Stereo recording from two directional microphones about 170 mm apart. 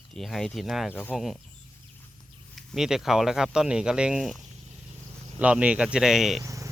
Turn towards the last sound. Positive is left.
turn(degrees=-20)  # may be behind; listen again after turning